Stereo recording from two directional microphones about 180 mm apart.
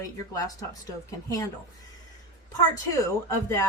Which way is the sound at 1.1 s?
20° left (ahead or behind).